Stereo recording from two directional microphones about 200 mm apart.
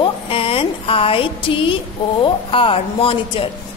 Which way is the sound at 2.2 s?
25° left (ahead or behind).